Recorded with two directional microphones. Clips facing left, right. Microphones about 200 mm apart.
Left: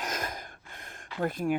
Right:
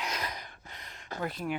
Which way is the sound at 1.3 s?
50° left (ahead or behind).